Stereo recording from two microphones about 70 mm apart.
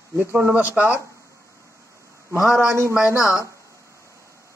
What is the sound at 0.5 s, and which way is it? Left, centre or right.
Speech, right.